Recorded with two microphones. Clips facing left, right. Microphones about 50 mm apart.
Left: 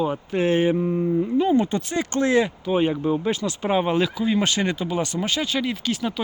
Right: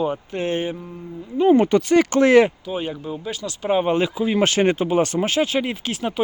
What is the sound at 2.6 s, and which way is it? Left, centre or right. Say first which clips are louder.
Speech: left 6 dB; left.